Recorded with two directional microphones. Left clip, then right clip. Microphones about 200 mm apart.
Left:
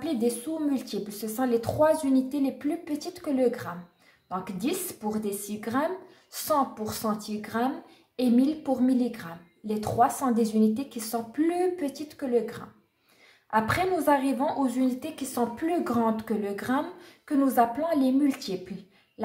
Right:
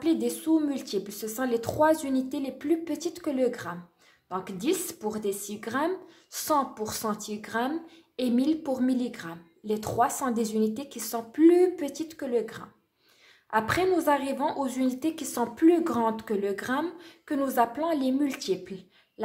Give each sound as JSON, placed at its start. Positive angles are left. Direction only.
{"t": 0.0, "sound": "a woman's voice", "side_deg": -40}